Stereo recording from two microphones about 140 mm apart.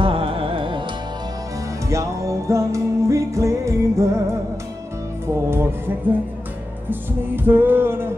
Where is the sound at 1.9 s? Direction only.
20° right (ahead or behind).